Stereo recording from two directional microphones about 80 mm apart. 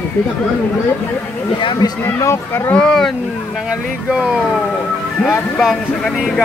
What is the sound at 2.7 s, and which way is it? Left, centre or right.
Speech, centre.